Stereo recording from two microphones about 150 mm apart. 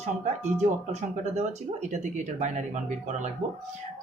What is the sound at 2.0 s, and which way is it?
Speech, 50° right (ahead or behind).